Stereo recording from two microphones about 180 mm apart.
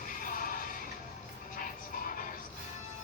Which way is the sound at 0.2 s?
50° left (ahead or behind).